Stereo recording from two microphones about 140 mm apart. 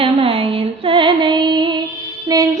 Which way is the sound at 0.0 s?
40° right (ahead or behind).